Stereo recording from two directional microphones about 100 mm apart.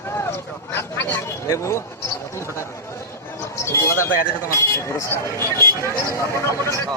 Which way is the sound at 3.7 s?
30° left (ahead or behind).